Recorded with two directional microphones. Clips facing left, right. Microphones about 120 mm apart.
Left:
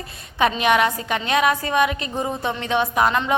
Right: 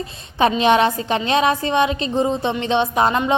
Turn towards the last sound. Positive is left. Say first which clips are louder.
# right 2 dB
turn(degrees=-25)  # may be behind; listen again after turning